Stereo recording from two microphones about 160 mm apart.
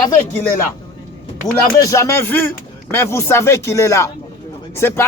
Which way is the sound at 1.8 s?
20° left (ahead or behind).